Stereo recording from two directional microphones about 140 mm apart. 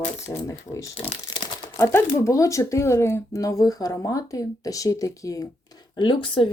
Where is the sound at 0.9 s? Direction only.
40° left (ahead or behind).